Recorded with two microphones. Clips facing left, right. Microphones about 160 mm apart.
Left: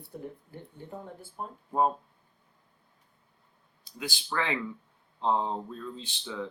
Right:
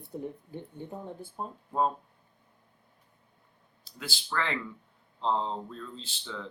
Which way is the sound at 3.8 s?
15° left (ahead or behind).